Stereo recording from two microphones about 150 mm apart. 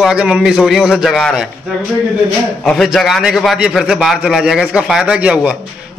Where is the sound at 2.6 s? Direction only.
5° left (ahead or behind).